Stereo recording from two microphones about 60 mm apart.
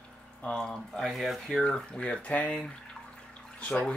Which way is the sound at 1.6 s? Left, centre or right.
Centre.